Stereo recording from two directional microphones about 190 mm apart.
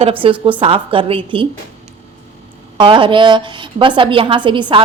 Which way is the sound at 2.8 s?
25° right (ahead or behind).